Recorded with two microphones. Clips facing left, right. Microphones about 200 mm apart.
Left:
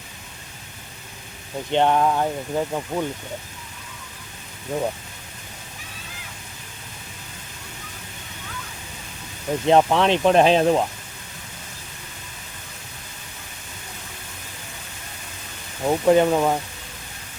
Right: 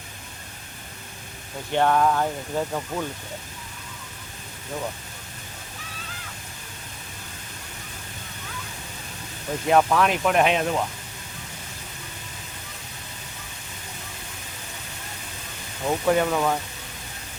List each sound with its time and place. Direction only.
1.7 s speech: 20° left (ahead or behind)
4.7 s speech: 25° left (ahead or behind)
9.6 s speech: 25° left (ahead or behind)
15.9 s speech: 20° left (ahead or behind)